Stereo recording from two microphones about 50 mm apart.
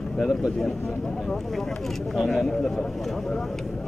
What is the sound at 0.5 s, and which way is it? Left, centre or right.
Speech, centre.